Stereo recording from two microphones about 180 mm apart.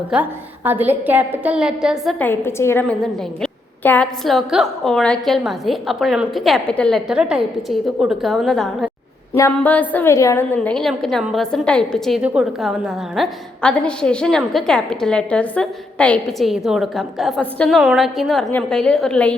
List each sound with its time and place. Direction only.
0.1 s a woman's voice: 10° right (ahead or behind)
2.1 s a woman's voice: 10° left (ahead or behind)